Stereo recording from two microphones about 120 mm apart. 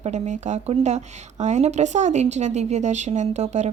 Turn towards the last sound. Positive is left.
turn(degrees=-70)  # may be behind; listen again after turning